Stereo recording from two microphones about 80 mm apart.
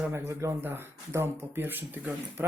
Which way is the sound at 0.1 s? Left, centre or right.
Right.